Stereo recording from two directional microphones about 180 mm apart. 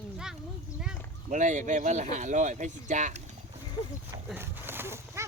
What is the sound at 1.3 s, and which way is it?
Speech, 45° right (ahead or behind).